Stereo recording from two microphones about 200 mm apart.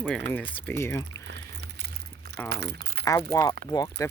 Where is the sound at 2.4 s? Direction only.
55° right (ahead or behind).